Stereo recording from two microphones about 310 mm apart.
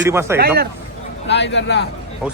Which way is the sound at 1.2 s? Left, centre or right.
Left.